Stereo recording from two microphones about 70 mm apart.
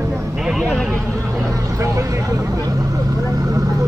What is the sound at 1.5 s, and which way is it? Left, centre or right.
Vehicle, right.